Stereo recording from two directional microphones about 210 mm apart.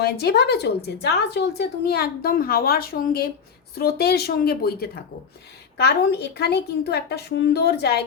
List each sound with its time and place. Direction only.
0.0 s speech: 50° left (ahead or behind)